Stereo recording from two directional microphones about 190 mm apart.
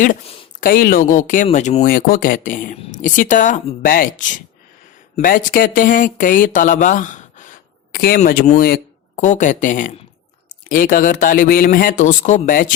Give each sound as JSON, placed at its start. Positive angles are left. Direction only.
{"t": 0.6, "sound": "a man's voice", "side_deg": 50}
{"t": 9.1, "sound": "a man's voice", "side_deg": 40}